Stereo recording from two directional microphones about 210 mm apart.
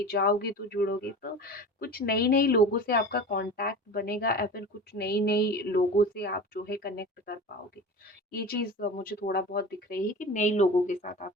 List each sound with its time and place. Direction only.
0.0 s speech: 45° left (ahead or behind)